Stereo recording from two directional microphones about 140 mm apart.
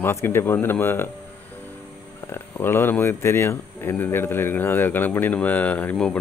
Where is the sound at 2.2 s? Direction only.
15° left (ahead or behind).